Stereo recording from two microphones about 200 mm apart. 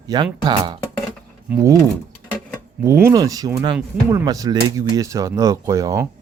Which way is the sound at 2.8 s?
15° right (ahead or behind).